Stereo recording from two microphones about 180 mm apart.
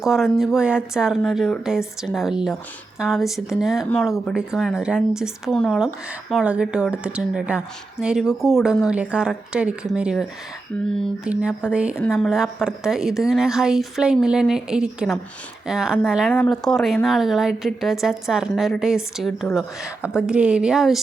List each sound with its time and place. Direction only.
0.0 s a woman's voice: 5° right (ahead or behind)